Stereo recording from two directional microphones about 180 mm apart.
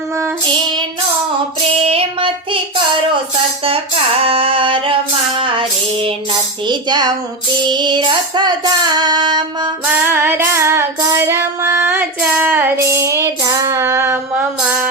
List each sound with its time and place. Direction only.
0.4 s child singing: 25° right (ahead or behind)
4.2 s female singing: 30° right (ahead or behind)
9.8 s child singing: 10° right (ahead or behind)